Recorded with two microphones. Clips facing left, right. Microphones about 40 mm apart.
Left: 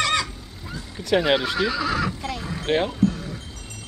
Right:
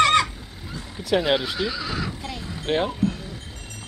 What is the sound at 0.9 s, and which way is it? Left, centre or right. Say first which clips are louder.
Speech: left 1 dB; centre.